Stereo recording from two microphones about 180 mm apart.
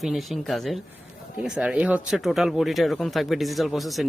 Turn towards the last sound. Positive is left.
turn(degrees=0)  # may be behind; listen again after turning